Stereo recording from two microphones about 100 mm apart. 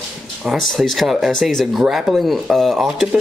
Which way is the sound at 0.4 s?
Centre (ahead or behind).